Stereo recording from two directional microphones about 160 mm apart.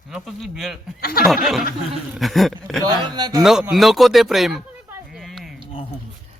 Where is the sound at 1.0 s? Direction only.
70° left (ahead or behind).